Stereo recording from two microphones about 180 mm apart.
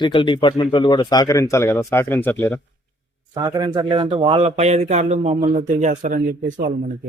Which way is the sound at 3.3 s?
20° right (ahead or behind).